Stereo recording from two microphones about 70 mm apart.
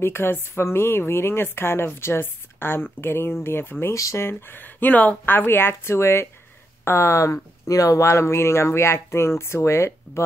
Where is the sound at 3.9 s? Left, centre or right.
Left.